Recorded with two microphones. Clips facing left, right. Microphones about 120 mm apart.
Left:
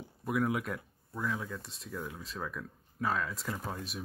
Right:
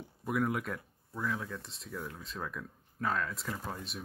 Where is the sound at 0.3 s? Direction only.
Centre (ahead or behind).